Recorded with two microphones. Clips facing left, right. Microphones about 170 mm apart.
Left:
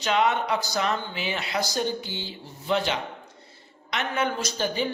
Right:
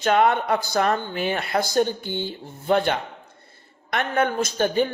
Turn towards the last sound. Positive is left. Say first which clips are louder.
# right 6 dB
turn(degrees=-55)  # may be behind; listen again after turning